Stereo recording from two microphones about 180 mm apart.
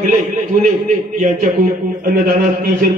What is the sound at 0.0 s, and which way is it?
A man's voice, 45° right (ahead or behind).